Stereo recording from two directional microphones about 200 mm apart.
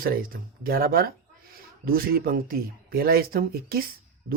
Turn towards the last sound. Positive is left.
turn(degrees=-50)  # may be behind; listen again after turning